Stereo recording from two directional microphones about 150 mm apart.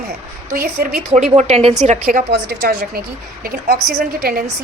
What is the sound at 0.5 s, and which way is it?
Speech, 85° right.